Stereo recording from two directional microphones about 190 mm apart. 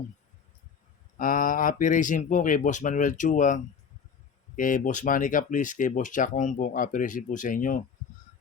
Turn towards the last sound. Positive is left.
turn(degrees=45)  # may be behind; listen again after turning